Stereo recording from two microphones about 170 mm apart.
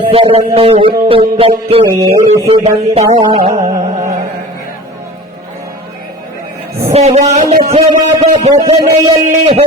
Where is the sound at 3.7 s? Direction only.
20° right (ahead or behind).